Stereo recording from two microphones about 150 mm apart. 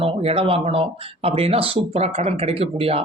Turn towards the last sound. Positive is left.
turn(degrees=-40)  # may be behind; listen again after turning